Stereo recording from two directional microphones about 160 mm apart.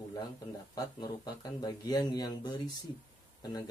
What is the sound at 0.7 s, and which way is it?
Speech, 25° left (ahead or behind).